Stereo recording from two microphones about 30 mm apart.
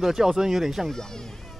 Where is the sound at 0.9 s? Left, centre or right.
Centre.